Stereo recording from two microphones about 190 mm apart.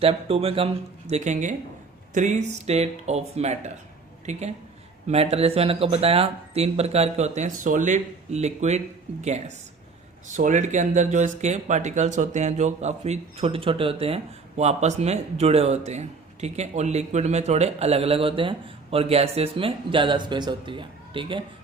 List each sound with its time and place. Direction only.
0.0 s speech: 30° right (ahead or behind)